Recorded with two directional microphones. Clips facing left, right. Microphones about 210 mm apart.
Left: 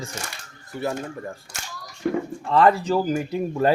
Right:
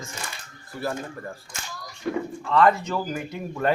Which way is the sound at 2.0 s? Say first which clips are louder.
Left 3 dB; 45° left (ahead or behind).